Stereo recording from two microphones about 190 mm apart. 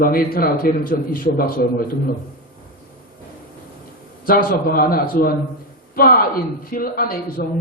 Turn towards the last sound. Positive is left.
turn(degrees=55)  # may be behind; listen again after turning